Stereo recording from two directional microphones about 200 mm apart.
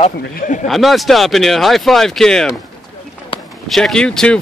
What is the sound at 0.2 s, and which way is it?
Speech, 45° left (ahead or behind).